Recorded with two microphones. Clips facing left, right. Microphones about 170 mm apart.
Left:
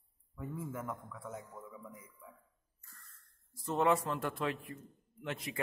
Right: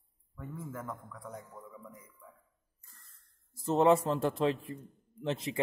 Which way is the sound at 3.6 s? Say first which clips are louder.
Right 6 dB; 30° right (ahead or behind).